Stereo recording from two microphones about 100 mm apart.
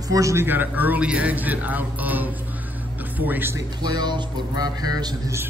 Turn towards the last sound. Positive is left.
turn(degrees=-40)  # may be behind; listen again after turning